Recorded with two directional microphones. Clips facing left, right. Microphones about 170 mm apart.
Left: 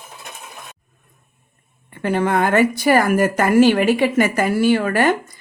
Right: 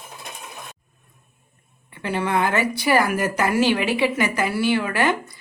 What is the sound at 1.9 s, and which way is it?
A woman's voice, 50° left (ahead or behind).